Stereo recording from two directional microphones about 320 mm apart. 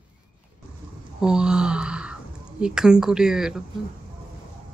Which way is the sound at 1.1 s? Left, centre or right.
Centre.